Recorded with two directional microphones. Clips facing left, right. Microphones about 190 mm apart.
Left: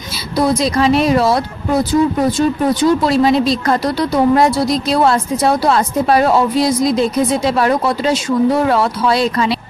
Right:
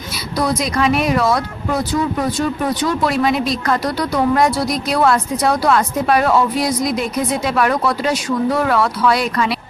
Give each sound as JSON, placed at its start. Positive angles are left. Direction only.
{"t": 0.4, "sound": "speech", "side_deg": 30}